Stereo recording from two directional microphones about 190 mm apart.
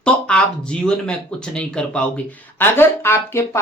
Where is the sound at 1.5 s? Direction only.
5° left (ahead or behind).